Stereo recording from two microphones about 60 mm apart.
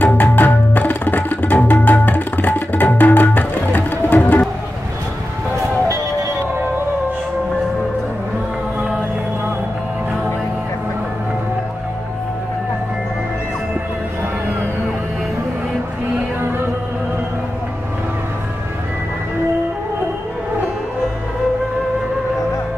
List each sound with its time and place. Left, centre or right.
0.0 s tabla: left